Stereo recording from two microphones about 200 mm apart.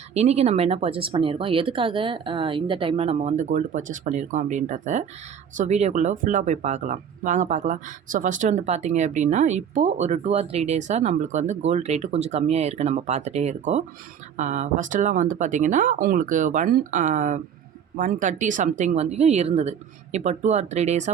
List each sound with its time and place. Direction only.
0.1 s speech: 30° right (ahead or behind)